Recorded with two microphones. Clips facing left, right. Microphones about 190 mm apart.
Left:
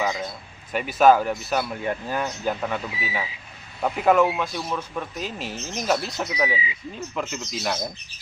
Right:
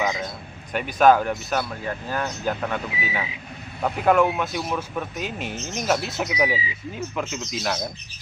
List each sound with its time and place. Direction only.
0.0 s a sound: centre (ahead or behind)
0.7 s speech: 5° left (ahead or behind)
1.8 s speech: 20° left (ahead or behind)
2.1 s speech: 5° left (ahead or behind)